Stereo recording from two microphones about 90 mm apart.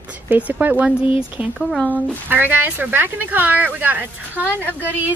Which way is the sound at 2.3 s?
20° right (ahead or behind).